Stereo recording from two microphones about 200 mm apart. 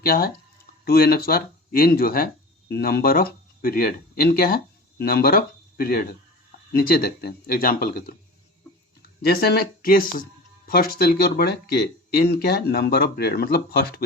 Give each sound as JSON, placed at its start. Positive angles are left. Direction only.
{"t": 0.0, "sound": "speech", "side_deg": 50}